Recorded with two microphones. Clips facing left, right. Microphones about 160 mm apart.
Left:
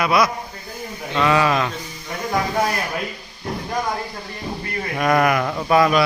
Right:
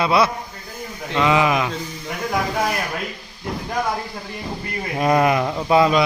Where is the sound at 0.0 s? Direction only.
25° right (ahead or behind).